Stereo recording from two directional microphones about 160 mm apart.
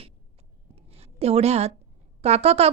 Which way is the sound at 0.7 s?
40° right (ahead or behind).